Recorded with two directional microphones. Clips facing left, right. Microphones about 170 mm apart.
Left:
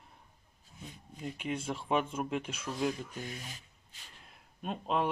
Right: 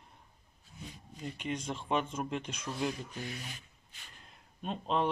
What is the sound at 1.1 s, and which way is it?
Speech, 5° left (ahead or behind).